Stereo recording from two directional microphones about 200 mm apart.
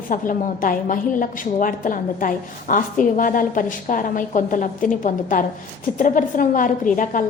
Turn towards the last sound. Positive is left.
turn(degrees=40)  # may be behind; listen again after turning